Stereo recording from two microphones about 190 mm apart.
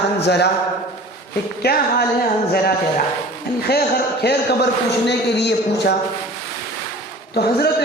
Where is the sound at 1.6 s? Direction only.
55° left (ahead or behind).